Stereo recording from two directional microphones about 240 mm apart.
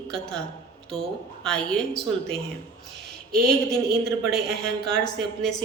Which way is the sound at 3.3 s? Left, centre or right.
Right.